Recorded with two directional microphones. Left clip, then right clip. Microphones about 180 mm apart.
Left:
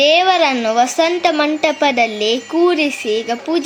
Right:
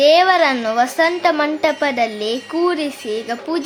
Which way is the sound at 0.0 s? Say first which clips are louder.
Even; 10° left (ahead or behind).